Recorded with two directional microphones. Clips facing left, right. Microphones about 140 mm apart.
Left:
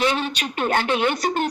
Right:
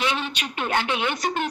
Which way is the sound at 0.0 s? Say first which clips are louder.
Left 4 dB; 40° left (ahead or behind).